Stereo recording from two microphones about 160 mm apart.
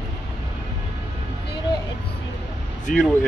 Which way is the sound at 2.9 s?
60° left (ahead or behind).